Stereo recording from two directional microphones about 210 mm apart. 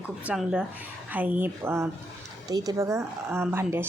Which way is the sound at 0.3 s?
5° right (ahead or behind).